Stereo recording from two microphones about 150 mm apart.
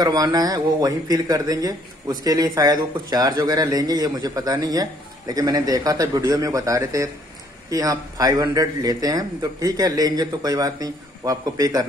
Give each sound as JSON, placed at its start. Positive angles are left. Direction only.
{"t": 0.0, "sound": "speech", "side_deg": -25}